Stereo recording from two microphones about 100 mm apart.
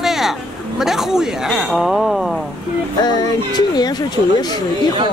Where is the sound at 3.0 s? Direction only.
45° left (ahead or behind).